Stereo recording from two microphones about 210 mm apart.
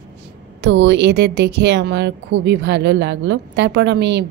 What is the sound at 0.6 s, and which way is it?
A woman's voice, 55° right (ahead or behind).